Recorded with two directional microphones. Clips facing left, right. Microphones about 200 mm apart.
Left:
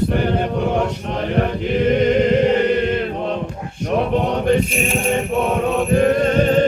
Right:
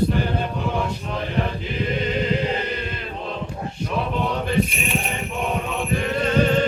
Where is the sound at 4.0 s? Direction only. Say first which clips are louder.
Left 6 dB; 65° left (ahead or behind).